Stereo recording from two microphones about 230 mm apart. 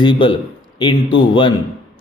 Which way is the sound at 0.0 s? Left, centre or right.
Left.